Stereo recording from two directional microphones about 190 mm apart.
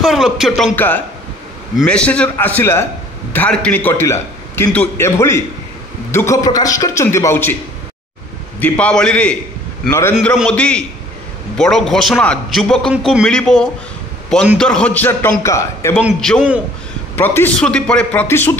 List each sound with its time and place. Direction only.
0.0 s speech: centre (ahead or behind)
0.7 s a man's voice: 10° left (ahead or behind)
8.5 s a man's voice: 5° left (ahead or behind)
16.0 s a man's voice: centre (ahead or behind)